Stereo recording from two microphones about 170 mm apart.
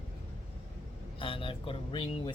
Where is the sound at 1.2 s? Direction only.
30° left (ahead or behind).